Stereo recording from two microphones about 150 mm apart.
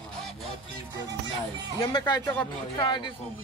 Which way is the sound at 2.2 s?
10° left (ahead or behind).